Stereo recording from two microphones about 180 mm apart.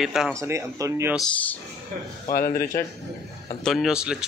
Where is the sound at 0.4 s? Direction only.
15° right (ahead or behind).